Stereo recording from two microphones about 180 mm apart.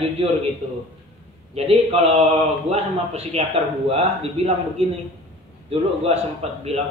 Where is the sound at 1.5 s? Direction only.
35° right (ahead or behind).